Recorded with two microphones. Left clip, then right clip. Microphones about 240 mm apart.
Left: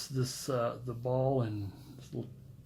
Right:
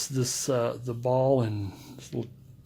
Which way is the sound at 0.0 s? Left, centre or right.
Right.